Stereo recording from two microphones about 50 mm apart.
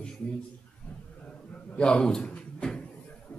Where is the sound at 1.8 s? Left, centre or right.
Centre.